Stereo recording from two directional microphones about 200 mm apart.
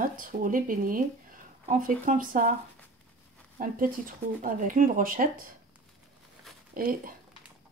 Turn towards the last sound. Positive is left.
turn(degrees=-45)  # may be behind; listen again after turning